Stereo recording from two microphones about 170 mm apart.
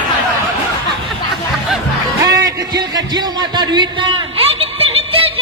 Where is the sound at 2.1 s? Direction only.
20° right (ahead or behind).